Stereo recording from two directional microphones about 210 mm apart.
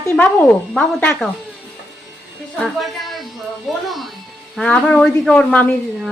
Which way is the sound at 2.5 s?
Centre (ahead or behind).